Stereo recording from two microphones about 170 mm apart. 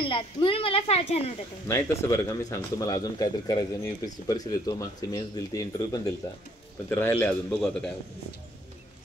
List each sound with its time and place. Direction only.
0.0 s a woman's voice: 30° left (ahead or behind)
1.7 s speech: 15° left (ahead or behind)